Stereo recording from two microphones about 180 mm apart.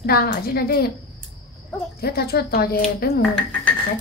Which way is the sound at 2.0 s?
60° left (ahead or behind).